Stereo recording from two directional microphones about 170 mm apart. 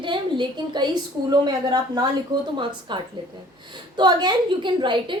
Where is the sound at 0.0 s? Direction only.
30° right (ahead or behind).